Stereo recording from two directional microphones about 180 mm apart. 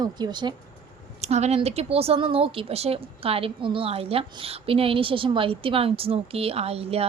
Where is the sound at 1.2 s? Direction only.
35° right (ahead or behind).